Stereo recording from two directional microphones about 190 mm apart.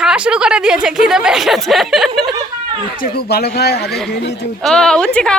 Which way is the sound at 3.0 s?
55° left (ahead or behind).